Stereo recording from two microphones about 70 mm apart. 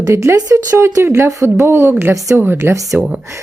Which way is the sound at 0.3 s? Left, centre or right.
Right.